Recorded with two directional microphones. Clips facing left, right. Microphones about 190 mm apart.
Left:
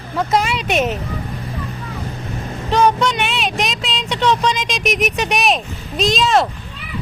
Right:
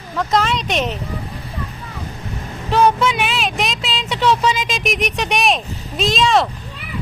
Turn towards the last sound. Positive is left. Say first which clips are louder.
# left 1 dB
turn(degrees=0)  # may be behind; listen again after turning